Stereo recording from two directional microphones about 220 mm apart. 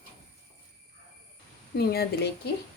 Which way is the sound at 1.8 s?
45° left (ahead or behind).